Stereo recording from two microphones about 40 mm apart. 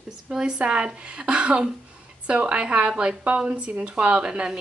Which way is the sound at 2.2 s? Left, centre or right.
Right.